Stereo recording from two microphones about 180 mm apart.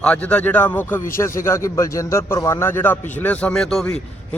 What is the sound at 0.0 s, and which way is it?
Speech, 10° left (ahead or behind).